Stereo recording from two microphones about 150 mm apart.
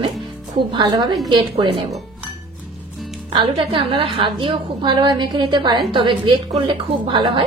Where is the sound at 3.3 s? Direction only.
35° right (ahead or behind).